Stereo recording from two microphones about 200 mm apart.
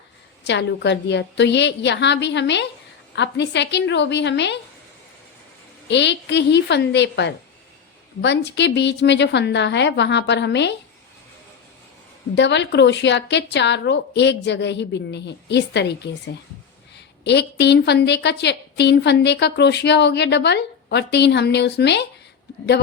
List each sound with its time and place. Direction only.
0.4 s a woman's voice: 60° left (ahead or behind)
5.9 s a woman's voice: 60° left (ahead or behind)
12.3 s a woman's voice: 60° left (ahead or behind)